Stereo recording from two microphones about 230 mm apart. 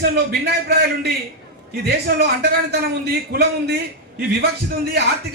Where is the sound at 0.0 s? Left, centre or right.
Right.